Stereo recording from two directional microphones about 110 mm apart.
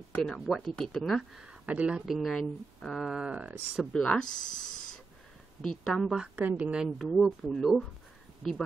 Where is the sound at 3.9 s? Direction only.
10° left (ahead or behind).